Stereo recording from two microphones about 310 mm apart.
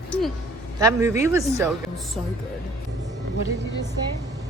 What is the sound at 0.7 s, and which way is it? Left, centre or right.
Speech, centre.